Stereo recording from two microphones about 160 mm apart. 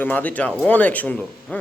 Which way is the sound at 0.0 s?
10° left (ahead or behind).